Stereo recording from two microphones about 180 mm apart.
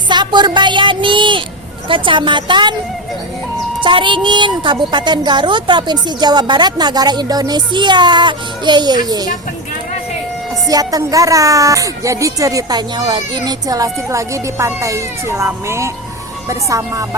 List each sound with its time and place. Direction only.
0.1 s a woman's voice: 25° right (ahead or behind)
3.8 s a woman's voice: 25° right (ahead or behind)
10.7 s a woman's voice: 20° right (ahead or behind)